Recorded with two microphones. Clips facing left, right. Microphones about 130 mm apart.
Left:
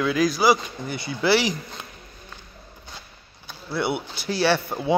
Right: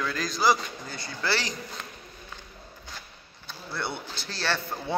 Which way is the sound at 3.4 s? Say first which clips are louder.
Left 8 dB; 5° left (ahead or behind).